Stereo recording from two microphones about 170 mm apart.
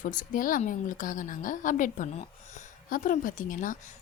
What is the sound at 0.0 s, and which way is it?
A woman's voice, 50° left (ahead or behind).